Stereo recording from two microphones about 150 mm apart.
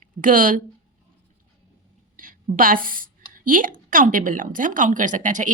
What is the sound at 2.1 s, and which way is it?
A woman's voice, 65° right (ahead or behind).